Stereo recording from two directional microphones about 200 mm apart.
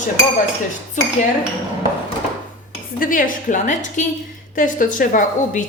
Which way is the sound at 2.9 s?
45° left (ahead or behind).